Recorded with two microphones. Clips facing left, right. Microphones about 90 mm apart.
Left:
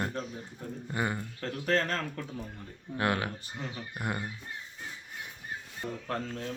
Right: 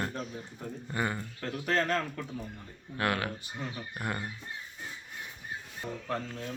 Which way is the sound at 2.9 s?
25° left (ahead or behind).